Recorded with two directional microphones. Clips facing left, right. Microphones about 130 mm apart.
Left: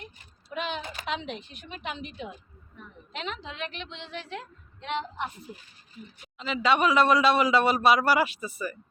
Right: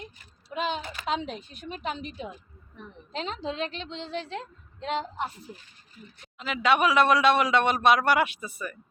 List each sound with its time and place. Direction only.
0.5 s a woman's voice: 35° right (ahead or behind)
6.4 s a man's voice: centre (ahead or behind)